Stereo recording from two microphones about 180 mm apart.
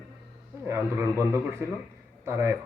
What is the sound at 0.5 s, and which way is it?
Speech, 15° right (ahead or behind).